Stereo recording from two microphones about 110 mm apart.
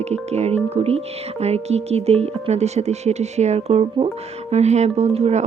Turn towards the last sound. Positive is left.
turn(degrees=-80)